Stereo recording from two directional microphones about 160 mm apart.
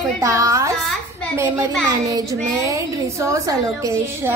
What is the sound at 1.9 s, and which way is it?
A woman's voice, 20° right (ahead or behind).